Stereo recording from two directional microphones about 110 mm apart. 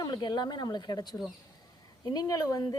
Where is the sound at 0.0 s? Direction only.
40° left (ahead or behind).